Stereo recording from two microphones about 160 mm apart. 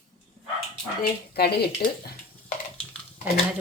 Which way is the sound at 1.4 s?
90° left.